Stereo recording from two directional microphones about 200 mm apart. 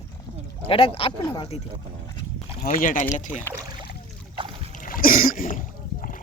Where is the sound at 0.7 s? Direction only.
25° left (ahead or behind).